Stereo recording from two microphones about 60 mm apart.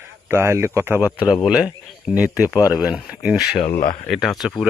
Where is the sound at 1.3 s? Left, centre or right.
Centre.